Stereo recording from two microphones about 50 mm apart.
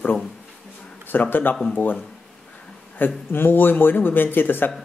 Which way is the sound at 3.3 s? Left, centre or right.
Left.